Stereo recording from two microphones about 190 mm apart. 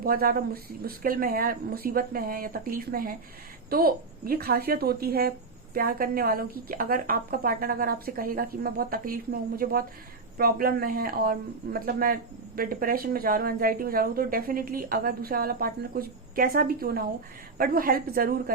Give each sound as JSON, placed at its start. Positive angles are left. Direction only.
{"t": 0.0, "sound": "speech", "side_deg": -50}